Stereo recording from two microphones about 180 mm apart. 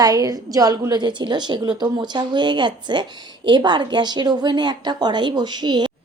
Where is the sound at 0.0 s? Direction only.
20° right (ahead or behind).